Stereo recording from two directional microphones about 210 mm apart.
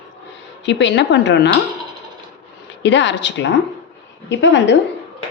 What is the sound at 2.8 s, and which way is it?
A woman's voice, 60° left (ahead or behind).